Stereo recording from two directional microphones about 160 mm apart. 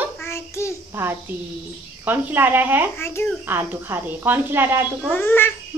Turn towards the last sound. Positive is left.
turn(degrees=15)  # may be behind; listen again after turning